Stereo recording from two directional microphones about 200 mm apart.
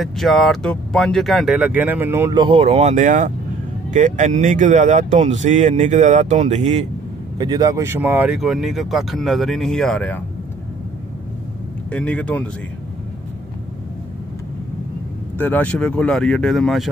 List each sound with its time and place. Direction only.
0.0 s speech: centre (ahead or behind)
2.4 s speech: 30° right (ahead or behind)
7.3 s speech: 20° right (ahead or behind); by 10.2 s 5° left (ahead or behind)
11.9 s speech: 5° left (ahead or behind)
15.3 s speech: 10° left (ahead or behind)